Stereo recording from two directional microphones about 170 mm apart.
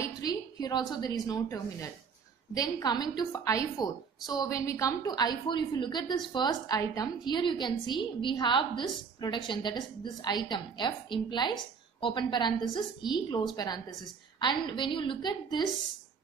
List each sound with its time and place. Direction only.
0.0 s a woman's voice: 25° left (ahead or behind)